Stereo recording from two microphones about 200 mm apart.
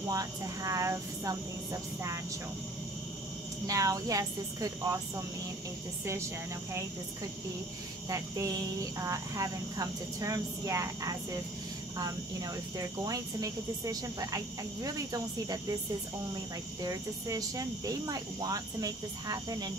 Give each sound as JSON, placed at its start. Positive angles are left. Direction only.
{"t": 0.1, "sound": "speech", "side_deg": -15}
{"t": 3.6, "sound": "speech", "side_deg": -15}
{"t": 8.1, "sound": "speech", "side_deg": -15}
{"t": 16.8, "sound": "speech", "side_deg": -15}